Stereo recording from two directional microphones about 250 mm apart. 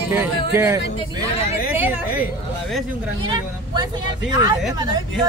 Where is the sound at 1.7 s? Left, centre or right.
Centre.